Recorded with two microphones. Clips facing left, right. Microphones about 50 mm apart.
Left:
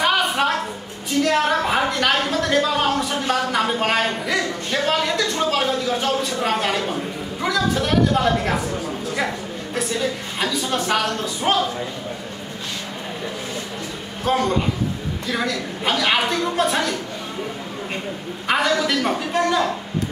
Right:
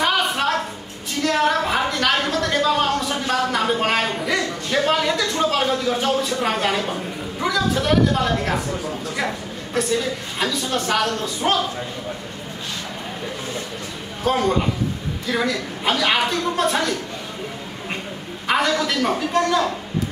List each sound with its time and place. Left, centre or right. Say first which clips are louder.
0.0 s a sound: left 1 dB; centre
4.8 s a woman's voice: left 1 dB; centre
10.4 s a woman's voice: even; centre
14.3 s a woman's voice: even; centre
18.5 s a woman's voice: even; centre